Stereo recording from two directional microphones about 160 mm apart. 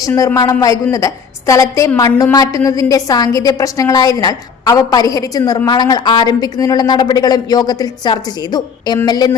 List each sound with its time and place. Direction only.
0.0 s a woman's voice: 15° left (ahead or behind)